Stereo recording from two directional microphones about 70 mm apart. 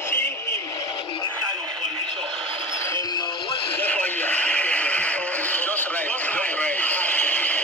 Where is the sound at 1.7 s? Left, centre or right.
Right.